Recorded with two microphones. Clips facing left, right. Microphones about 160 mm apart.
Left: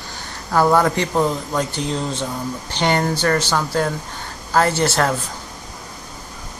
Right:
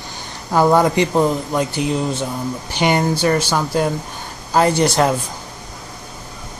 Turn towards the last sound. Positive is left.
turn(degrees=-15)  # may be behind; listen again after turning